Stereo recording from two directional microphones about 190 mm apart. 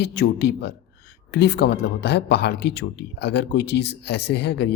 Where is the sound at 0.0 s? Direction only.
65° left (ahead or behind).